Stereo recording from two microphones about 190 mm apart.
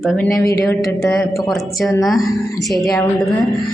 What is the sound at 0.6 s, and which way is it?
Speech, 15° left (ahead or behind).